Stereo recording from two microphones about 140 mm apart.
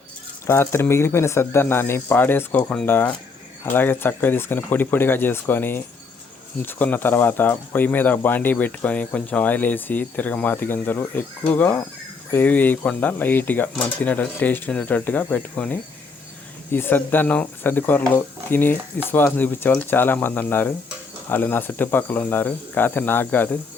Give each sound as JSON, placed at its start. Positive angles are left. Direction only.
{"t": 0.4, "sound": "speech", "side_deg": 20}